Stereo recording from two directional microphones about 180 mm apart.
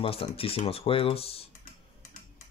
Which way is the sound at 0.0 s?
30° left (ahead or behind).